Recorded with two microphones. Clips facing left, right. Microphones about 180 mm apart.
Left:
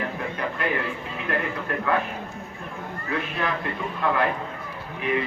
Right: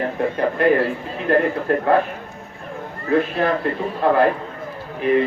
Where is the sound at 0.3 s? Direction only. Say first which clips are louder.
Right 11 dB; 35° right (ahead or behind).